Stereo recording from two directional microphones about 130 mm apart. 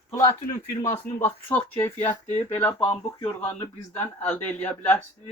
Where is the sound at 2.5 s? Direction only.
20° left (ahead or behind).